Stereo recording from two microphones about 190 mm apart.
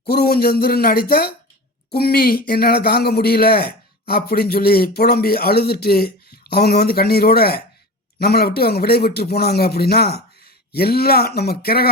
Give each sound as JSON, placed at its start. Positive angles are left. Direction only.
{"t": 0.0, "sound": "a man's voice", "side_deg": 55}